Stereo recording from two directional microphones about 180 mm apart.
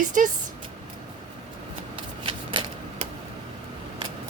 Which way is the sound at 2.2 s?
30° right (ahead or behind).